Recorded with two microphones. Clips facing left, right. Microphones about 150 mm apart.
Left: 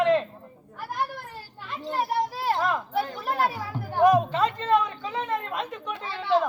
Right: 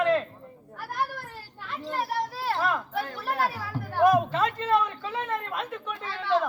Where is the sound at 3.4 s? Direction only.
20° left (ahead or behind).